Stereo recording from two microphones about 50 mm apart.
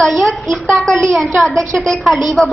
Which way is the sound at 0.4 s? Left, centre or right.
Centre.